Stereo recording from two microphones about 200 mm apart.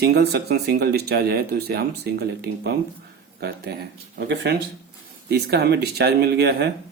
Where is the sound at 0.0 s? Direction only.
55° right (ahead or behind).